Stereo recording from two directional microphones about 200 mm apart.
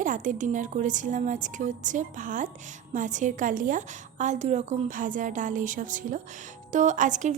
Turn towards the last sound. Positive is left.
turn(degrees=-40)  # may be behind; listen again after turning